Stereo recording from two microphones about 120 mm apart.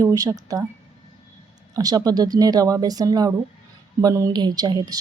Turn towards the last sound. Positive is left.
turn(degrees=-35)  # may be behind; listen again after turning